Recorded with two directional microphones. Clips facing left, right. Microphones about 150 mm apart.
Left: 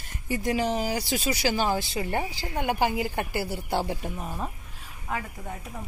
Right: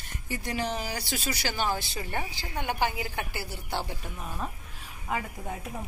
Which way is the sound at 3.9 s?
25° left (ahead or behind).